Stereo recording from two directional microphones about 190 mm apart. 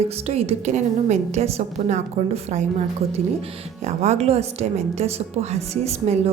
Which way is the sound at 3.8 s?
35° right (ahead or behind).